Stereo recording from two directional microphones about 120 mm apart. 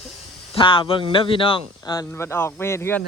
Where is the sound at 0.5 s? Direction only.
40° left (ahead or behind).